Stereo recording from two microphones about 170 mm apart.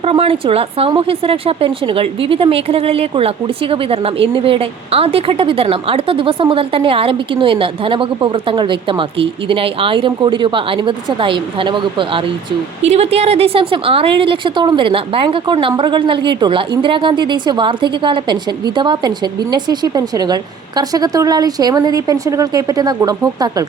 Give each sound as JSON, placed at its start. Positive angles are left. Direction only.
{"t": 0.0, "sound": "a woman's voice", "side_deg": -35}